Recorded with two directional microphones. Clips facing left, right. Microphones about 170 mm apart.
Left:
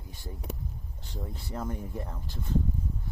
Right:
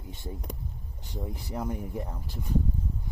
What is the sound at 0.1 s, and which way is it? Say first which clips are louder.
Speech: right 1 dB; 20° right (ahead or behind).